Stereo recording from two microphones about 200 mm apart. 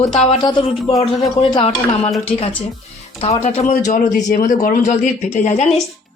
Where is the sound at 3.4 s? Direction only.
35° left (ahead or behind).